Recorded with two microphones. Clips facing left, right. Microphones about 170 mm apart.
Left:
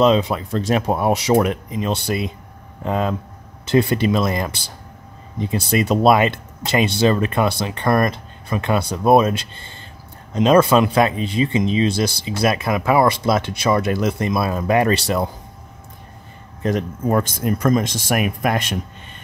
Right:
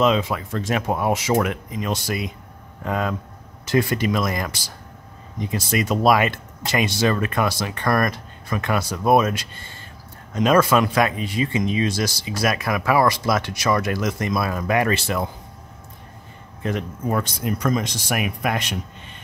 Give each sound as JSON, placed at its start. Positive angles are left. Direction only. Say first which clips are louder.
{"t": 0.0, "sound": "speech", "louder": "left 4 dB", "side_deg": 35}
{"t": 5.7, "sound": "speech", "louder": "left 3 dB", "side_deg": 30}
{"t": 16.6, "sound": "speech", "louder": "left 5 dB", "side_deg": 40}